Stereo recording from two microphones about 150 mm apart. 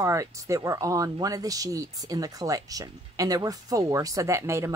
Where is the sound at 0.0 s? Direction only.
20° right (ahead or behind).